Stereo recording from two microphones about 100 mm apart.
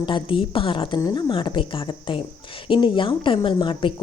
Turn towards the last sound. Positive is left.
turn(degrees=55)  # may be behind; listen again after turning